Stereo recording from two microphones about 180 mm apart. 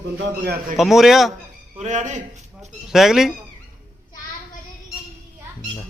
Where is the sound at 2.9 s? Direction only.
Centre (ahead or behind).